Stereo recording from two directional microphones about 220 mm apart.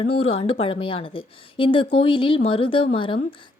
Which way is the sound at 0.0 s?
25° left (ahead or behind).